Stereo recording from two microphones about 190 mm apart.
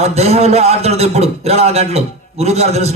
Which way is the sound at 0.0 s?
35° right (ahead or behind).